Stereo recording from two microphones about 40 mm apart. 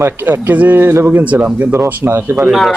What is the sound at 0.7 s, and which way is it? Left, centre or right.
Speech, right.